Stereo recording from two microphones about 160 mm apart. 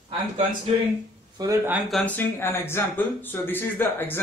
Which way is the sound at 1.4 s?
20° right (ahead or behind).